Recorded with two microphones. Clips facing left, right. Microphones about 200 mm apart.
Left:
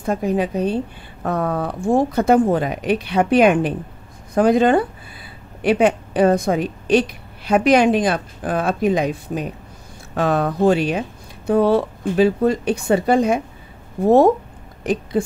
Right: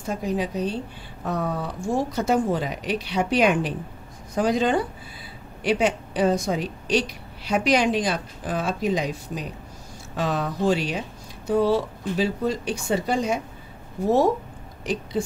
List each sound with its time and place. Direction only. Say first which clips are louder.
0.0 s a woman's voice: left 6 dB; 55° left (ahead or behind)